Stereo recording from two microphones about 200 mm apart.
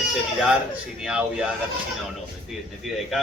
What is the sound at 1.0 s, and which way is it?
Speech, 5° right (ahead or behind).